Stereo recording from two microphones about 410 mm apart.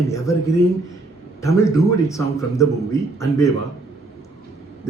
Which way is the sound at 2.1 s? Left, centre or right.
Centre.